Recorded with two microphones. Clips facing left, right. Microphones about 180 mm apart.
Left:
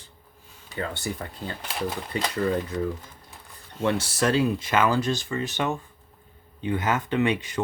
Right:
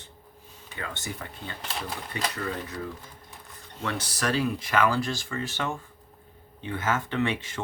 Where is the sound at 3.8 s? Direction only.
25° left (ahead or behind).